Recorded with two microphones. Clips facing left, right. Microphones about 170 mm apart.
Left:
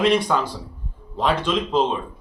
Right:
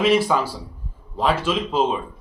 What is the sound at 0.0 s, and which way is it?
Speech, 5° right (ahead or behind).